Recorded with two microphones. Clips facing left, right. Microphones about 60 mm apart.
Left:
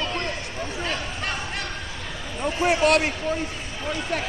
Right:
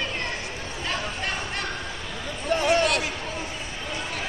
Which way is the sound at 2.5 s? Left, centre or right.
Right.